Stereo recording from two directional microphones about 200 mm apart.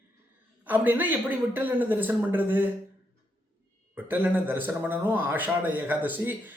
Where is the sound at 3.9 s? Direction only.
10° right (ahead or behind).